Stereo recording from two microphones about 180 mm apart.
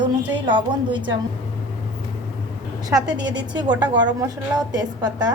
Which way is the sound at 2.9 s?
20° right (ahead or behind).